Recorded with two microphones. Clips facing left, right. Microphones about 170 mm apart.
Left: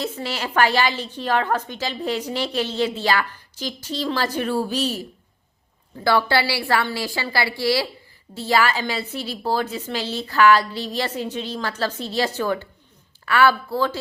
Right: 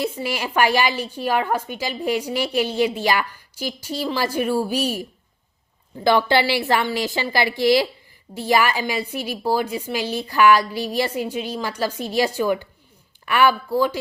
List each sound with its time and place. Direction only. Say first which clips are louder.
0.0 s a woman's voice: right 2 dB; 10° right (ahead or behind)